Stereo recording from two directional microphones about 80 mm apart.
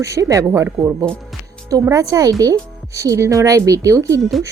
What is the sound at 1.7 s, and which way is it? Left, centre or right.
Speech, right.